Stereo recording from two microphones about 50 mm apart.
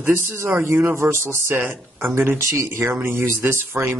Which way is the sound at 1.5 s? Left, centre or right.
Right.